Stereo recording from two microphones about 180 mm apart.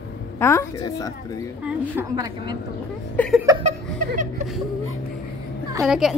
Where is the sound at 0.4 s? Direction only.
15° left (ahead or behind).